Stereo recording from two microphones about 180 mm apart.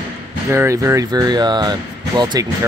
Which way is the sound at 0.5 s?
15° right (ahead or behind).